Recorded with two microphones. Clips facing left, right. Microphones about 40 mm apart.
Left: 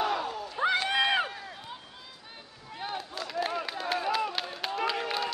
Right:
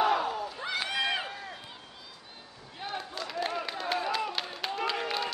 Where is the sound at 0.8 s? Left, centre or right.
Left.